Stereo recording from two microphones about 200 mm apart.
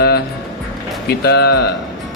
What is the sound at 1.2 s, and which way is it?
Speech, 55° left (ahead or behind).